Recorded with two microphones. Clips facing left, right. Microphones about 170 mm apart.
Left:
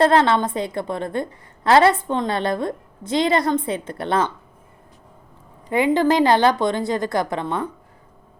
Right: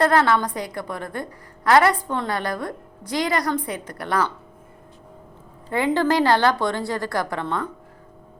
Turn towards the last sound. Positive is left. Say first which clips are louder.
# left 2 dB
turn(degrees=20)  # may be behind; listen again after turning